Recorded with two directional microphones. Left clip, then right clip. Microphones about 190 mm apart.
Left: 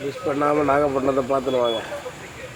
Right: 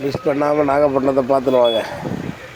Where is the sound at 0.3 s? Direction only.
20° right (ahead or behind).